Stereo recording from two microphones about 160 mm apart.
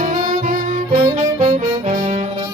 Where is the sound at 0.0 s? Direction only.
50° right (ahead or behind).